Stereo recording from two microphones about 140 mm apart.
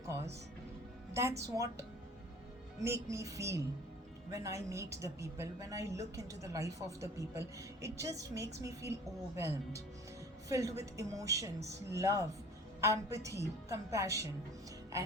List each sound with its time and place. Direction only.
1.4 s a woman's voice: 25° right (ahead or behind)
2.8 s a woman's voice: 20° right (ahead or behind)